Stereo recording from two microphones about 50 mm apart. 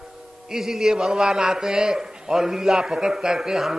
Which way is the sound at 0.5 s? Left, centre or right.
Centre.